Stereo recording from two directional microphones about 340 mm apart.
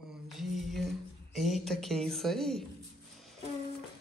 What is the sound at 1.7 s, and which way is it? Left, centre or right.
Speech, centre.